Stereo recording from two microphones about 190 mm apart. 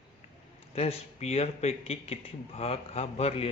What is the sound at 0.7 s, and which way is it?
A man's voice, 35° left (ahead or behind).